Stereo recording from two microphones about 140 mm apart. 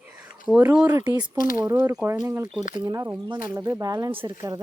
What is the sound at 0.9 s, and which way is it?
Speech, 30° right (ahead or behind).